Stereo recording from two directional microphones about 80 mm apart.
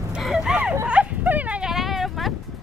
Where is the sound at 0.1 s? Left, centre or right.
Centre.